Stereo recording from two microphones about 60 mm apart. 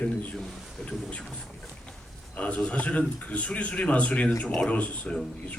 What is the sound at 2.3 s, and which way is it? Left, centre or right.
A man's voice, left.